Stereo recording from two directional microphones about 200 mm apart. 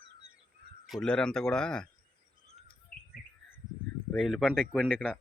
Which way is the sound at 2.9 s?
45° left (ahead or behind).